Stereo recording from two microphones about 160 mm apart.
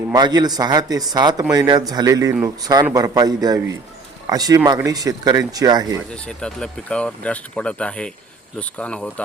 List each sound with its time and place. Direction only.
0.1 s speech: 25° right (ahead or behind)
6.1 s speech: 5° left (ahead or behind)